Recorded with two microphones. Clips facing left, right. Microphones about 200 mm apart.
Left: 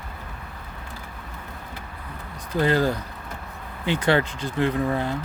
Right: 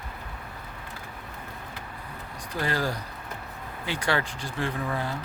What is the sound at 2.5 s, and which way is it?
Speech, 25° left (ahead or behind).